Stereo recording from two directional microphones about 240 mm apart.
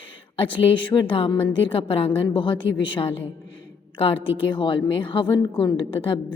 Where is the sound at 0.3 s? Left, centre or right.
Left.